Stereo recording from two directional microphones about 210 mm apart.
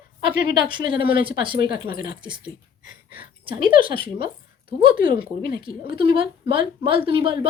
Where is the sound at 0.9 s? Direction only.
45° left (ahead or behind).